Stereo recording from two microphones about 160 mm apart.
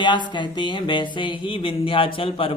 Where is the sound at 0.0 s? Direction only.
30° left (ahead or behind).